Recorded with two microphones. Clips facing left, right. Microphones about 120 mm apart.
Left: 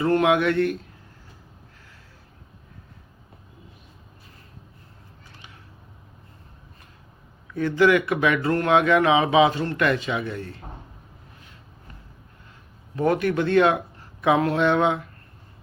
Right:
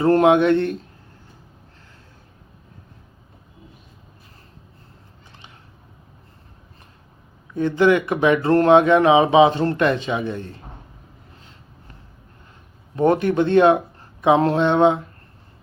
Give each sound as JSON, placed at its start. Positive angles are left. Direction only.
{"t": 0.0, "sound": "speech", "side_deg": -30}
{"t": 7.5, "sound": "speech", "side_deg": -20}
{"t": 13.0, "sound": "speech", "side_deg": -25}